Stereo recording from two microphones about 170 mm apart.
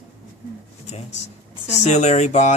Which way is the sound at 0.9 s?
40° left (ahead or behind).